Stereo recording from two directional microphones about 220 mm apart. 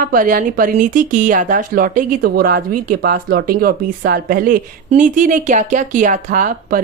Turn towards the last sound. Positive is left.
turn(degrees=-40)  # may be behind; listen again after turning